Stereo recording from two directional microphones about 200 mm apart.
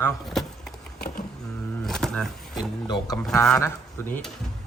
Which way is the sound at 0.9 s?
50° left (ahead or behind).